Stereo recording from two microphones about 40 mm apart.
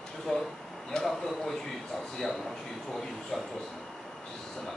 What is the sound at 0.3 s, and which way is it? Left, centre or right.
Speech, centre.